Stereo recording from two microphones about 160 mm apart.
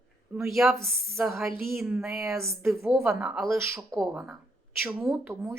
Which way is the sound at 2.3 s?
15° right (ahead or behind).